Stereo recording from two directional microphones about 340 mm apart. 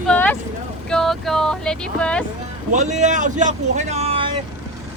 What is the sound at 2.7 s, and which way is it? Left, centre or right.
Speech, right.